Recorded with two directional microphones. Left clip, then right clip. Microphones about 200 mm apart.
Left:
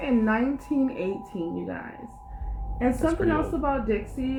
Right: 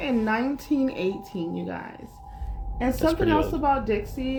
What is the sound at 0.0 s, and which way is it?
A woman's voice, 45° right (ahead or behind).